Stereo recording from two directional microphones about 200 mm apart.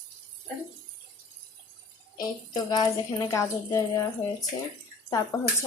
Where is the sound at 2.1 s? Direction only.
20° left (ahead or behind).